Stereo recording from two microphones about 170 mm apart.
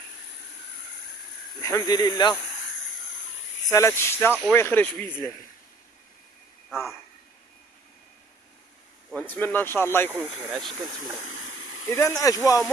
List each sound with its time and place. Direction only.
1.6 s speech: 20° left (ahead or behind)
3.7 s speech: 15° left (ahead or behind)
6.7 s a sound: centre (ahead or behind)
9.1 s speech: 10° left (ahead or behind)
10.1 s speech: centre (ahead or behind)
11.9 s speech: 15° left (ahead or behind)